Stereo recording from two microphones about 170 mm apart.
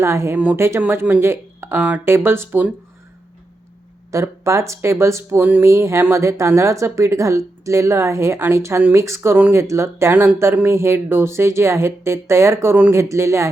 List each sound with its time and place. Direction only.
0.0 s speech: 15° right (ahead or behind)
4.1 s speech: 15° right (ahead or behind)